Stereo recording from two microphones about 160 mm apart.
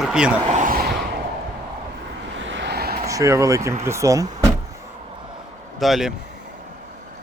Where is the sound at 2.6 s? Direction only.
80° right.